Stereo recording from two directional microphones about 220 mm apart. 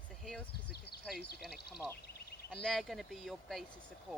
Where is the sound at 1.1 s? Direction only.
45° left (ahead or behind).